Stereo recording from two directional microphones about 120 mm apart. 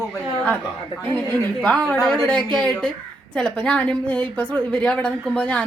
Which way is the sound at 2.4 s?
40° right (ahead or behind).